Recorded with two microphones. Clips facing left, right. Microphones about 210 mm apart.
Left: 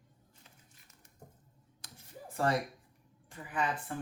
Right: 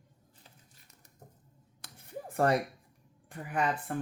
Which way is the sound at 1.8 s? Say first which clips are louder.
Right 7 dB; 60° right (ahead or behind).